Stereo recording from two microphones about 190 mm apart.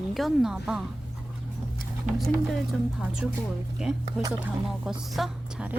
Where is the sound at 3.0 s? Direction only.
5° right (ahead or behind).